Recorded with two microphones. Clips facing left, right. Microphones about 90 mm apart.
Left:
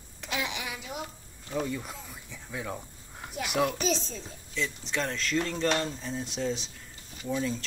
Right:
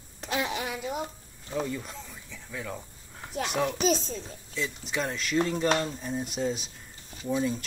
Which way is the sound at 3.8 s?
45° right (ahead or behind).